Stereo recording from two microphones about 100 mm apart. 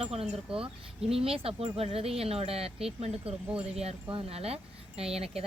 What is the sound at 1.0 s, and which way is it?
Speech, 75° right (ahead or behind).